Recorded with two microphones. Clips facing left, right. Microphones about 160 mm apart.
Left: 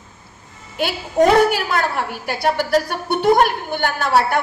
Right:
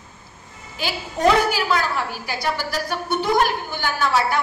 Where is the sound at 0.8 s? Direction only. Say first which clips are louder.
Left 4 dB; 65° left (ahead or behind).